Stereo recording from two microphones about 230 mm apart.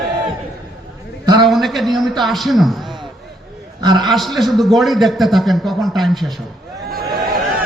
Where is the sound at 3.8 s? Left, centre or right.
Centre.